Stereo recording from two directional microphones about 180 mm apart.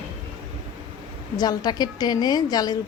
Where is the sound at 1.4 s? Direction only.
20° left (ahead or behind).